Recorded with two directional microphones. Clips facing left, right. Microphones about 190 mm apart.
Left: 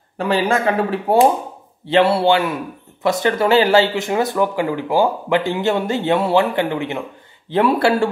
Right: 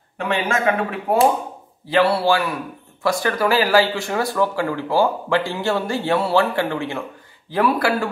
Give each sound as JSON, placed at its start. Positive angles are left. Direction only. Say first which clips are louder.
{"t": 0.2, "sound": "a man's voice", "louder": "left 4 dB", "side_deg": 35}